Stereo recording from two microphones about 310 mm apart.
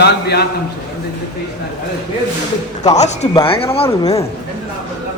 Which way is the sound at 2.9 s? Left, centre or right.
Left.